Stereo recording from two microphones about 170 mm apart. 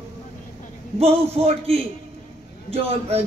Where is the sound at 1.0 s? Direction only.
35° right (ahead or behind).